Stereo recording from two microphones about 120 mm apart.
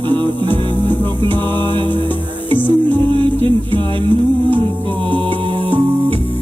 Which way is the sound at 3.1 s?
45° right (ahead or behind).